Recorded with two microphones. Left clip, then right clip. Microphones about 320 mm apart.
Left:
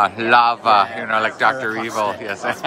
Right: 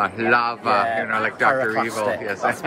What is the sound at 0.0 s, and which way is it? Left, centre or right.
Speech, centre.